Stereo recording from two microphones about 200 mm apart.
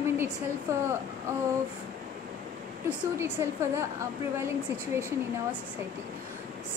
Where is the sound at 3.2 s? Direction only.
10° right (ahead or behind).